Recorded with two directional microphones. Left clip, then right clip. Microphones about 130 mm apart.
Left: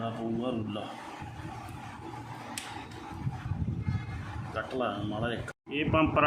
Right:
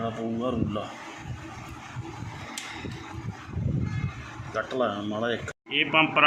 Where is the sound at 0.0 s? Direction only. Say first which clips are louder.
Right 4 dB; 60° right (ahead or behind).